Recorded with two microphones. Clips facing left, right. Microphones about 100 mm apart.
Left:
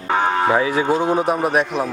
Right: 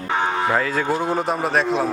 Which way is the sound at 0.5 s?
10° left (ahead or behind).